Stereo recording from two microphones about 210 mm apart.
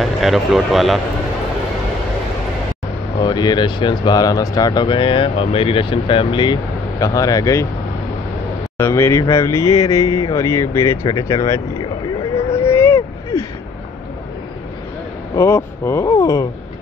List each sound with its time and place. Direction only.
0.0 s speech: centre (ahead or behind)
3.2 s speech: 20° left (ahead or behind)
8.7 s speech: 10° left (ahead or behind)
12.5 s a sound: 10° left (ahead or behind)
15.3 s speech: 10° left (ahead or behind)